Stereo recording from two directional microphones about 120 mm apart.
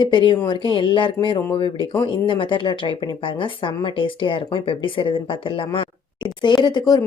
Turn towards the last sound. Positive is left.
turn(degrees=35)  # may be behind; listen again after turning